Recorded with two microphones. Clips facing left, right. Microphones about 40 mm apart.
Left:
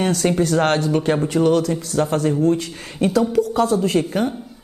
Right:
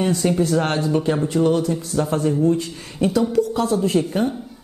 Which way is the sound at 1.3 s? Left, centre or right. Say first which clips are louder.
Left 2 dB; left.